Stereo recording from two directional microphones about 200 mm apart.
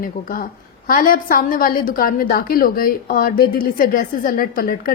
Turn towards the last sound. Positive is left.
turn(degrees=45)  # may be behind; listen again after turning